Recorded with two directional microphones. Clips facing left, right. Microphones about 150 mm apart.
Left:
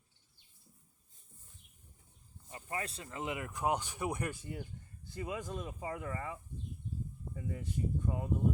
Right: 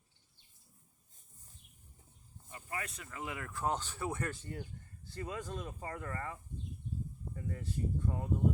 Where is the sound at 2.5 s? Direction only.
30° left (ahead or behind); by 8.2 s 15° left (ahead or behind).